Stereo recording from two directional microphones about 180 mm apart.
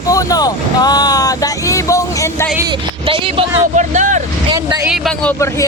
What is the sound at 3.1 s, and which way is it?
Speech, 30° right (ahead or behind).